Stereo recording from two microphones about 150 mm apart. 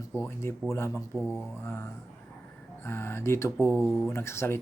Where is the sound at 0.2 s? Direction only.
15° left (ahead or behind).